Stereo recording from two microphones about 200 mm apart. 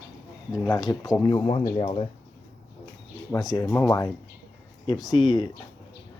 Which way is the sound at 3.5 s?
15° left (ahead or behind).